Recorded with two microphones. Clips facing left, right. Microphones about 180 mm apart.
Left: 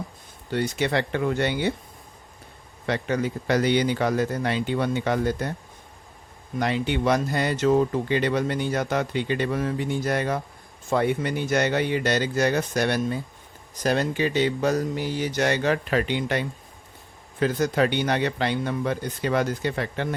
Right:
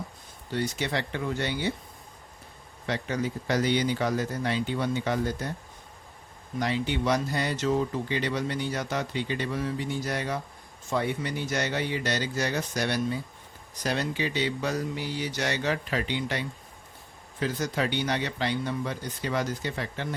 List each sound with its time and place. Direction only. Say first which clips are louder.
0.5 s speech: left 5 dB; 60° left (ahead or behind)
2.8 s speech: left 4 dB; 60° left (ahead or behind)
6.6 s speech: left 4 dB; 60° left (ahead or behind)